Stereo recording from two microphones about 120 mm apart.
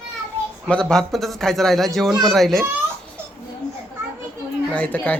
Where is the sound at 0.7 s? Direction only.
5° left (ahead or behind).